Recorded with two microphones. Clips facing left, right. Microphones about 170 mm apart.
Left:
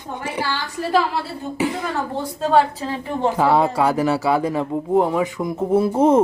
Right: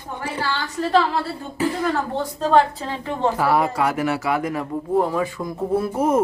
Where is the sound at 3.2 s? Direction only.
20° left (ahead or behind).